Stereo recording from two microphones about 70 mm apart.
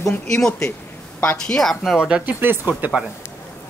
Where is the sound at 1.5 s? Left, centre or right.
Centre.